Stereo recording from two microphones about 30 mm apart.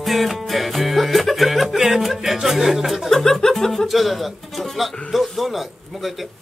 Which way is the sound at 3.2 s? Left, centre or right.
Centre.